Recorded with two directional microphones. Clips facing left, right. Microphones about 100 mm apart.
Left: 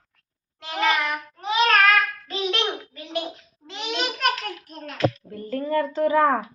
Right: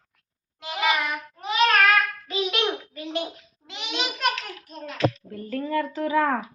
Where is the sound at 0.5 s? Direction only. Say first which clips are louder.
Left 2 dB; 15° right (ahead or behind).